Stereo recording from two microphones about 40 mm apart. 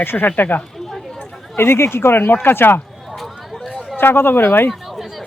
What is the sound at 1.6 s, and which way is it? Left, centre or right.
Speech, left.